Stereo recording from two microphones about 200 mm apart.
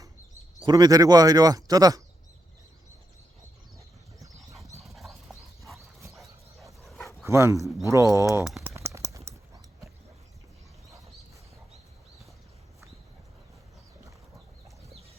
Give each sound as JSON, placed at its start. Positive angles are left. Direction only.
{"t": 0.6, "sound": "speech", "side_deg": -20}
{"t": 3.8, "sound": "a sound", "side_deg": -15}
{"t": 4.8, "sound": "clip-clop", "side_deg": 0}
{"t": 6.1, "sound": "dog", "side_deg": 0}
{"t": 7.3, "sound": "speech", "side_deg": -15}
{"t": 8.4, "sound": "speech", "side_deg": 0}
{"t": 8.7, "sound": "a sound", "side_deg": -15}